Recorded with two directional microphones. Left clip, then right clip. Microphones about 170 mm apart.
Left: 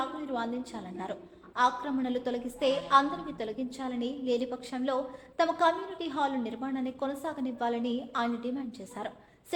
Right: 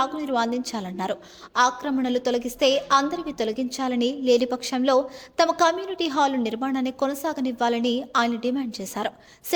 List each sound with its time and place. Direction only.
0.0 s a woman's voice: 50° right (ahead or behind)